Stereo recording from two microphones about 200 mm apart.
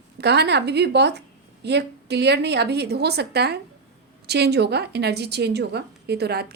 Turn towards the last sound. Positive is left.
turn(degrees=-55)  # may be behind; listen again after turning